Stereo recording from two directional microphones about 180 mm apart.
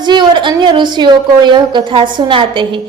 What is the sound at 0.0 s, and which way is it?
A woman's voice, 25° right (ahead or behind).